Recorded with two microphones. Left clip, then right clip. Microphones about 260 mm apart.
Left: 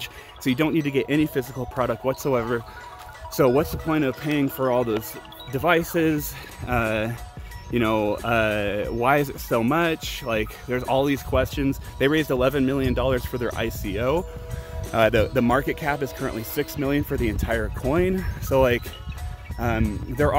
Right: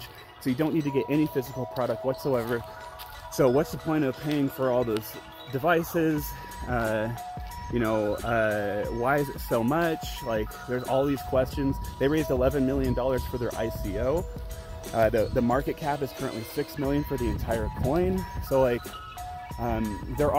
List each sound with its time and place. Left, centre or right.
0.4 s speech: centre
1.8 s speech: centre